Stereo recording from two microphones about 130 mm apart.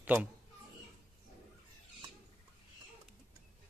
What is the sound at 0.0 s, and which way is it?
Speech, 10° right (ahead or behind).